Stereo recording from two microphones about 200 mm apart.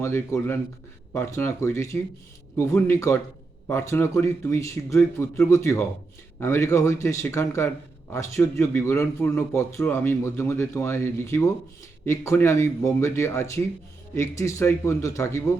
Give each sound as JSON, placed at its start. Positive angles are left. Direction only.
{"t": 0.0, "sound": "a man's voice", "side_deg": 15}